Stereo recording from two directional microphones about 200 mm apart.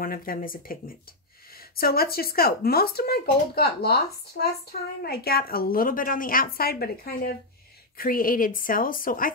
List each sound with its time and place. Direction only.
0.0 s speech: 45° left (ahead or behind)